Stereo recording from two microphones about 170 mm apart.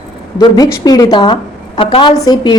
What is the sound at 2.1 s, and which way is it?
Speech, 20° left (ahead or behind).